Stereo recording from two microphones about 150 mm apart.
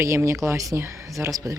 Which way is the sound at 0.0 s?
20° right (ahead or behind).